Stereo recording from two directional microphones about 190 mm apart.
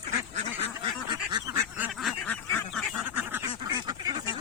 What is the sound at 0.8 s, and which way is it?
Duck, 25° right (ahead or behind).